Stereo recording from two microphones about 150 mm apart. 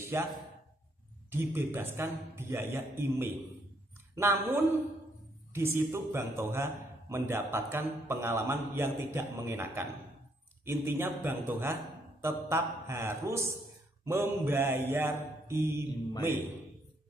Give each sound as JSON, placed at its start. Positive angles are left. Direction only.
{"t": 0.0, "sound": "speech", "side_deg": -15}
{"t": 1.3, "sound": "a man's voice", "side_deg": -15}